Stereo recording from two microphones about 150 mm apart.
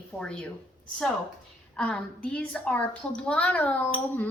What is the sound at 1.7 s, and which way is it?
A woman's voice, 5° left (ahead or behind).